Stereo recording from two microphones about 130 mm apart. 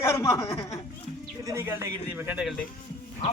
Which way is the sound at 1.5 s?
20° right (ahead or behind).